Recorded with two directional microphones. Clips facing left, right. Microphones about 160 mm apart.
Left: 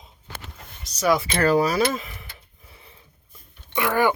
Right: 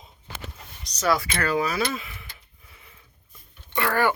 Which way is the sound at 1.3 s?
35° left (ahead or behind).